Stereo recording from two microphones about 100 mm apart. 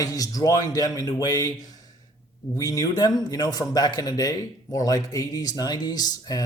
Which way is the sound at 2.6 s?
35° left (ahead or behind).